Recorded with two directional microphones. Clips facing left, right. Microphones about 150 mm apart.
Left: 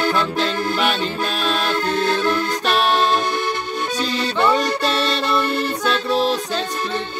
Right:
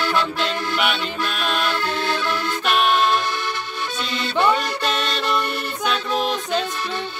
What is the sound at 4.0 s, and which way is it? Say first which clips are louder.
Accordion: left 5 dB; 35° left (ahead or behind).